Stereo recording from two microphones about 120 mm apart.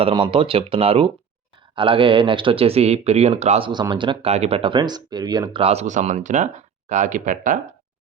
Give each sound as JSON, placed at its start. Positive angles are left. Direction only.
{"t": 0.0, "sound": "speech", "side_deg": -50}
{"t": 3.7, "sound": "speech", "side_deg": -40}
{"t": 4.3, "sound": "speech", "side_deg": -60}
{"t": 5.6, "sound": "speech", "side_deg": -75}